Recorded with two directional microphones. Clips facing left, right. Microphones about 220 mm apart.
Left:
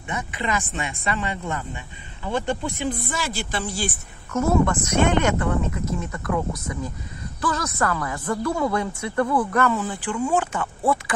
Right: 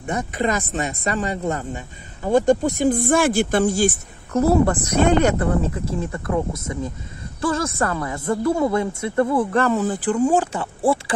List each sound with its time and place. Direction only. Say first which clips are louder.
0.0 s speech: right 6 dB; 40° right (ahead or behind)
4.3 s a woman's voice: right 4 dB; 35° right (ahead or behind)